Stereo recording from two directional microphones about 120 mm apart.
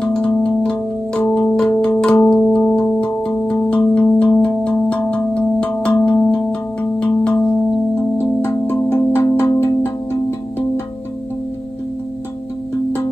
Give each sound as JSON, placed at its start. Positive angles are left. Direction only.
{"t": 0.0, "sound": "music", "side_deg": 5}
{"t": 7.9, "sound": "music", "side_deg": 20}